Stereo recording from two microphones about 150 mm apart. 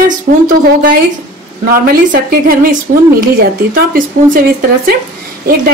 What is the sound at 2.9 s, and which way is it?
Speech, 65° right (ahead or behind).